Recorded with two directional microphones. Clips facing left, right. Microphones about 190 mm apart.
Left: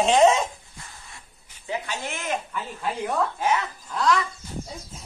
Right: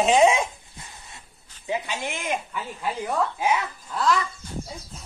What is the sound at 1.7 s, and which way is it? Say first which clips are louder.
Speech: right 2 dB; 15° right (ahead or behind).